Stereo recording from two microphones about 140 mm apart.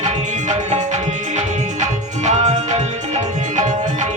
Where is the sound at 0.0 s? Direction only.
60° right (ahead or behind).